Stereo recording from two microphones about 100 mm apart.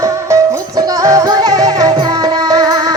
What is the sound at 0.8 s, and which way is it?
Music, 35° right (ahead or behind).